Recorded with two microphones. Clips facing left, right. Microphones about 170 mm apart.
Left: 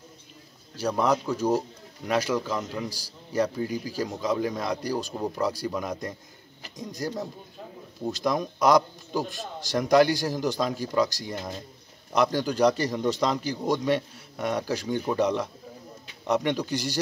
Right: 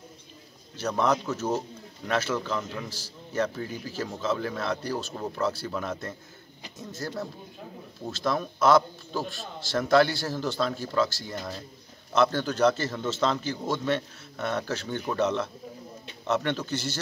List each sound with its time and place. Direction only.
0.7 s a man's voice: 10° left (ahead or behind)